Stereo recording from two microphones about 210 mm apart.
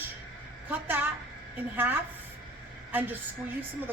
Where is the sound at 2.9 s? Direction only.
10° right (ahead or behind).